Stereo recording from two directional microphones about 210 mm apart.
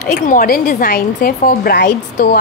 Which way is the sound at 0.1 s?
40° left (ahead or behind).